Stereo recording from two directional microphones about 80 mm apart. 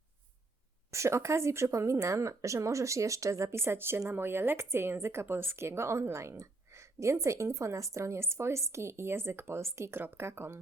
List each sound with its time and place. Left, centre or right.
0.9 s speech: right